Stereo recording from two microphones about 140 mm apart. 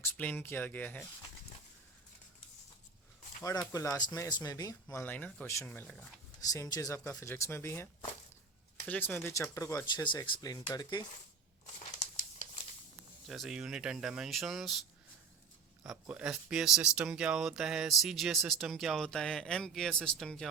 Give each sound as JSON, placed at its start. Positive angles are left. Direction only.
{"t": 0.0, "sound": "speech", "side_deg": 15}
{"t": 3.7, "sound": "speech", "side_deg": 25}
{"t": 5.0, "sound": "speech", "side_deg": 10}
{"t": 6.4, "sound": "speech", "side_deg": 25}
{"t": 8.9, "sound": "speech", "side_deg": 15}
{"t": 13.2, "sound": "speech", "side_deg": 0}
{"t": 15.8, "sound": "speech", "side_deg": -5}